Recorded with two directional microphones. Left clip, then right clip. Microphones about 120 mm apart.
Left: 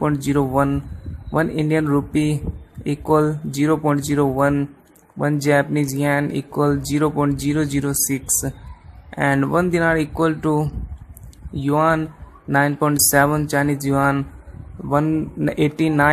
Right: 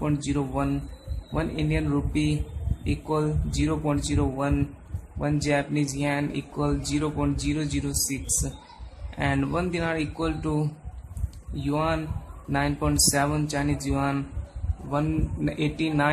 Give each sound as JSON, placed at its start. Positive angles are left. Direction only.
{"t": 0.0, "sound": "speech", "side_deg": 75}
{"t": 1.3, "sound": "speech", "side_deg": 60}
{"t": 1.7, "sound": "speech", "side_deg": 80}
{"t": 9.1, "sound": "speech", "side_deg": 60}
{"t": 11.5, "sound": "speech", "side_deg": 70}
{"t": 13.5, "sound": "speech", "side_deg": 70}
{"t": 13.9, "sound": "speech", "side_deg": 50}
{"t": 14.9, "sound": "speech", "side_deg": 70}